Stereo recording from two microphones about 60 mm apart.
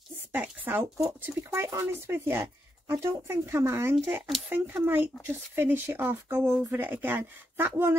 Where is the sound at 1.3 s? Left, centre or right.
Right.